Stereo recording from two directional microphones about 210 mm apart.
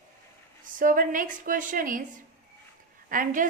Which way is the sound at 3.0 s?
40° right (ahead or behind).